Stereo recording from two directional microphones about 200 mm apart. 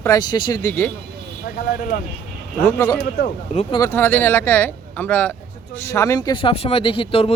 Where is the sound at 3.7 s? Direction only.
15° left (ahead or behind).